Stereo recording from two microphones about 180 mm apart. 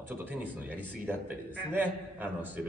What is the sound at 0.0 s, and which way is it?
A man's voice, 10° right (ahead or behind).